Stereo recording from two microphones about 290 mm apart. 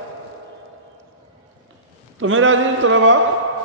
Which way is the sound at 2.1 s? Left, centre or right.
Right.